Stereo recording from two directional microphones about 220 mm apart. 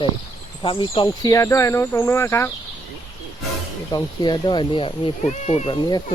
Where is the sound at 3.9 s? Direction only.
20° left (ahead or behind).